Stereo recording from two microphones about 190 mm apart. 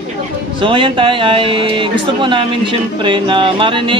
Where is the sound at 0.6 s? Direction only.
25° right (ahead or behind).